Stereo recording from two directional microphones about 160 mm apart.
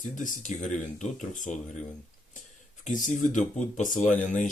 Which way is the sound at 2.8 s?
50° left (ahead or behind).